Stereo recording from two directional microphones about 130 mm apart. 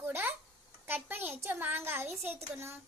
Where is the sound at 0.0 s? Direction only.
20° right (ahead or behind).